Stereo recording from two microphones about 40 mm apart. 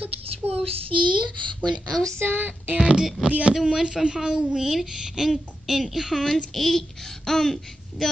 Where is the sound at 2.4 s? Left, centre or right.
Right.